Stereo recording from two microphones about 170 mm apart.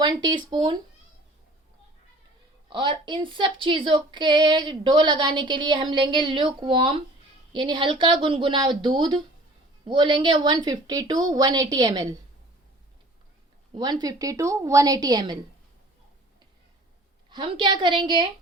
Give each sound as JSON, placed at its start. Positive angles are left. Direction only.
{"t": 0.0, "sound": "speech", "side_deg": -25}
{"t": 2.6, "sound": "speech", "side_deg": -30}
{"t": 13.7, "sound": "speech", "side_deg": -25}
{"t": 17.2, "sound": "speech", "side_deg": -30}